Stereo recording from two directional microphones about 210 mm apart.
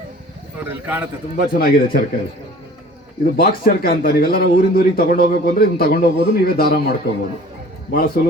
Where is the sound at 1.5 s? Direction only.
45° left (ahead or behind).